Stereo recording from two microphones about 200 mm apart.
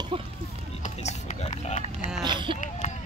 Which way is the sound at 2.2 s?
25° right (ahead or behind).